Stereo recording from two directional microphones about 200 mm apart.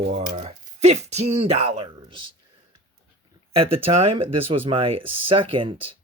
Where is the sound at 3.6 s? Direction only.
25° right (ahead or behind).